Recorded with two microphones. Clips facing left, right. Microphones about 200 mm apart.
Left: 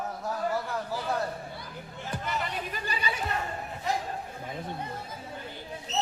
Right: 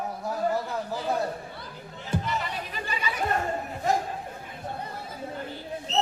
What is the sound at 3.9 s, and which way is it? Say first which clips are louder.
Speech: right 5 dB; 45° right (ahead or behind).